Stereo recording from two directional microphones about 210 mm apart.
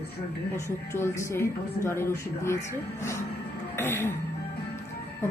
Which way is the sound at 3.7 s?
10° left (ahead or behind).